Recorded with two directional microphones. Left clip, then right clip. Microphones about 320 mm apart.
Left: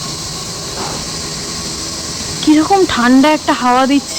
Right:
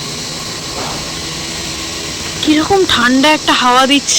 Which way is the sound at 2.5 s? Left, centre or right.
Centre.